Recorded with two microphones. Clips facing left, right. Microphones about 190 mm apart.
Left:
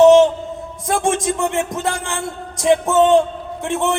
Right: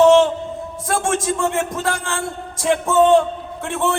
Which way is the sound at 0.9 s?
20° left (ahead or behind).